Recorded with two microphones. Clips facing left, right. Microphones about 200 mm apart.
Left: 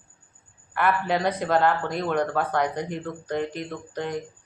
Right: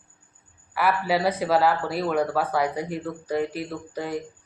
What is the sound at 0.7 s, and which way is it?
A woman's voice, 5° right (ahead or behind).